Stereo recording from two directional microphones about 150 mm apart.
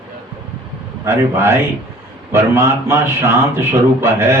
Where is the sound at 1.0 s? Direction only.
15° right (ahead or behind).